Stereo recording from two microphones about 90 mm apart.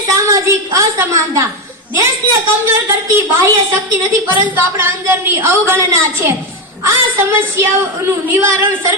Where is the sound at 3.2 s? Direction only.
30° right (ahead or behind).